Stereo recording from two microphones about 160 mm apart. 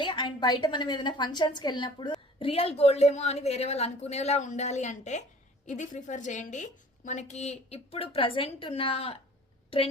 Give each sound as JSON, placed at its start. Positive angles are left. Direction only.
{"t": 0.0, "sound": "a woman's voice", "side_deg": 30}